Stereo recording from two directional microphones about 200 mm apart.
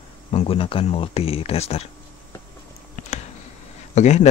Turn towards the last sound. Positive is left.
turn(degrees=35)  # may be behind; listen again after turning